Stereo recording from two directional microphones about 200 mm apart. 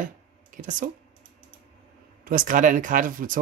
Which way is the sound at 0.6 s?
40° right (ahead or behind).